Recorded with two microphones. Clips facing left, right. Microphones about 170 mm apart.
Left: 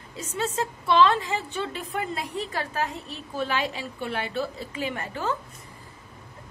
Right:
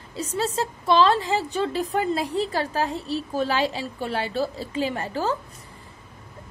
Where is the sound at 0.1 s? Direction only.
35° right (ahead or behind).